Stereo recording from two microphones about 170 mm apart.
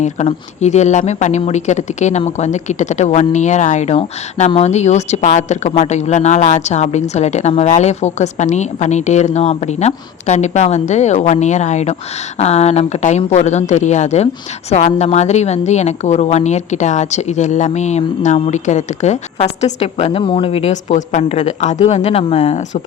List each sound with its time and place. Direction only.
0.0 s a woman's voice: 45° left (ahead or behind)